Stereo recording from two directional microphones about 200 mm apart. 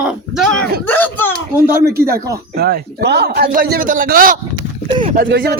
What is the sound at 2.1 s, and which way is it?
Speech, 15° right (ahead or behind).